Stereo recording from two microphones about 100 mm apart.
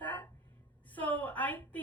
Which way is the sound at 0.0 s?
15° left (ahead or behind).